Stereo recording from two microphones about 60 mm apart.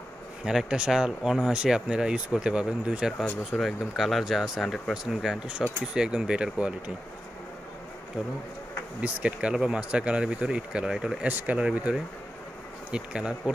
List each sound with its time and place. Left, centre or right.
0.5 s speech: centre
3.5 s speech: centre
9.0 s speech: centre
11.2 s speech: right
12.9 s speech: centre